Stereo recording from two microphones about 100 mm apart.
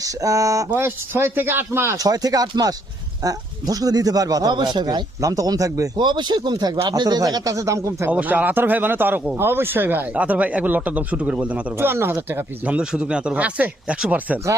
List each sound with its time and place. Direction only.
0.0 s speech: 35° right (ahead or behind)
0.7 s speech: 25° right (ahead or behind)
2.0 s speech: 40° right (ahead or behind)
6.0 s speech: 50° right (ahead or behind); by 8.1 s 30° right (ahead or behind)
8.1 s speech: 15° right (ahead or behind)